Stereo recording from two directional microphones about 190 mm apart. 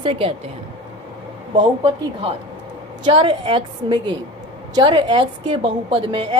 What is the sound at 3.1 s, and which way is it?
A woman's voice, 25° right (ahead or behind).